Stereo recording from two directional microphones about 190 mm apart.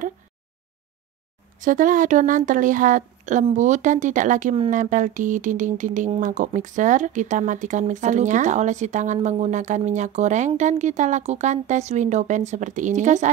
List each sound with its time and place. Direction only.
1.6 s speech: 45° right (ahead or behind)